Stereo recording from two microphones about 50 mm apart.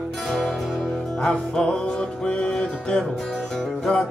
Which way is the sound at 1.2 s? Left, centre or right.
Centre.